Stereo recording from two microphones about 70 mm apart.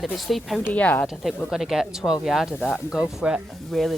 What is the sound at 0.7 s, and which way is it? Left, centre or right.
Speech, left.